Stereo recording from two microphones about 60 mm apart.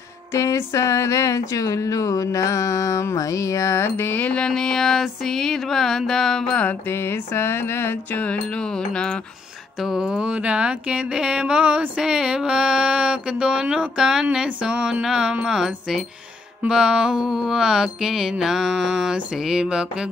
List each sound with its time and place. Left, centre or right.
0.3 s a sound: left
0.7 s music: left
4.5 s a sound: centre
6.9 s mantra: left
8.2 s music: left
9.8 s speech: centre